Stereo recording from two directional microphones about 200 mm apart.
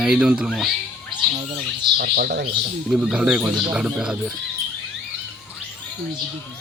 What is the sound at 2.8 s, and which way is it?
Speech, 5° right (ahead or behind).